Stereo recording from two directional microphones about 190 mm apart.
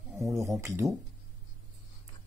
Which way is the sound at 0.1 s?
15° right (ahead or behind).